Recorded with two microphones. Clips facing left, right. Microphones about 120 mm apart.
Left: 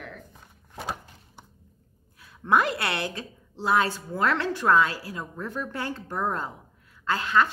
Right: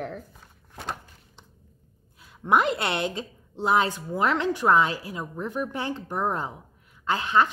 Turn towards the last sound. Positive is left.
turn(degrees=-20)  # may be behind; listen again after turning